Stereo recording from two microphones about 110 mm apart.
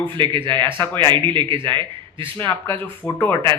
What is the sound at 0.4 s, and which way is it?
Speech, 20° left (ahead or behind).